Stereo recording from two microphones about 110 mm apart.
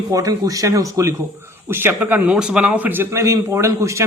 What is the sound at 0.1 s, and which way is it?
A man's voice, 35° right (ahead or behind).